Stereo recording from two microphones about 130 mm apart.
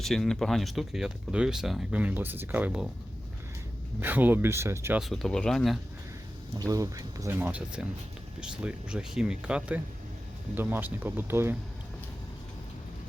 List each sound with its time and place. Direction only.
0.0 s speech: centre (ahead or behind)
4.0 s speech: 15° right (ahead or behind)
4.9 s speech: centre (ahead or behind)
6.6 s speech: 25° right (ahead or behind)
7.3 s speech: 10° right (ahead or behind)